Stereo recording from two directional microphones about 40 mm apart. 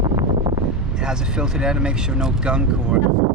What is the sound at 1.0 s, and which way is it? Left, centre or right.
Speech, centre.